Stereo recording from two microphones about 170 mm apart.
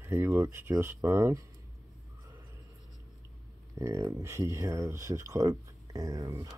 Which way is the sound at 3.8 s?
15° right (ahead or behind).